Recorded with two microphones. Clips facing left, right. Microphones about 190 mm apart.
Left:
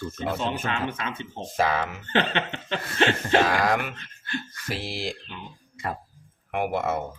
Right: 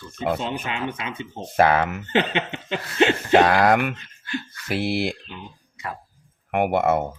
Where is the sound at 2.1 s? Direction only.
15° right (ahead or behind).